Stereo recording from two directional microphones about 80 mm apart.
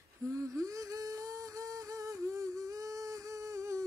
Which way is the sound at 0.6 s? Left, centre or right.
Right.